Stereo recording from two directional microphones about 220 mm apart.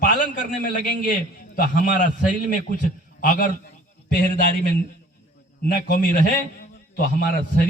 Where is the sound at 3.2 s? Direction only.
35° left (ahead or behind).